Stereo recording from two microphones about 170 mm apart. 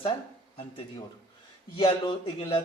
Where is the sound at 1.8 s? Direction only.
30° left (ahead or behind).